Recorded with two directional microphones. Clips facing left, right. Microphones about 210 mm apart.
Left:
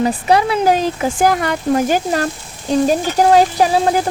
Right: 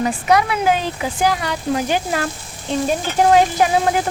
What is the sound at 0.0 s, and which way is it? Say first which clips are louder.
Speech: left 2 dB; 30° left (ahead or behind).